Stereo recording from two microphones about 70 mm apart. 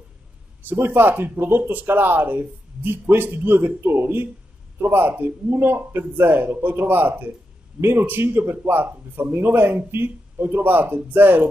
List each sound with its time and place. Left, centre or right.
0.7 s speech: right
7.8 s speech: centre
8.1 s speech: right